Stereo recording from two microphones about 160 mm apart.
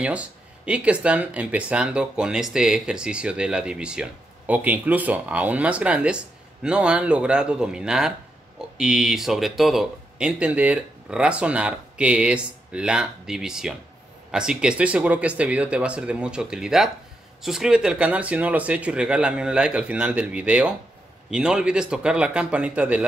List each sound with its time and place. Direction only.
0.0 s speech: 10° right (ahead or behind)